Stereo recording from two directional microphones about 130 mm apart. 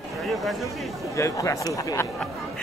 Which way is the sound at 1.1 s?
25° left (ahead or behind).